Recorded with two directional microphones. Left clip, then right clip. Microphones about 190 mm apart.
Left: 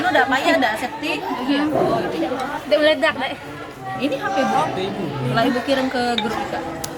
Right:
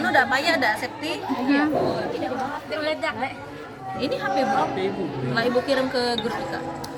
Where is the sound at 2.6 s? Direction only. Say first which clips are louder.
Left 13 dB; 50° left (ahead or behind).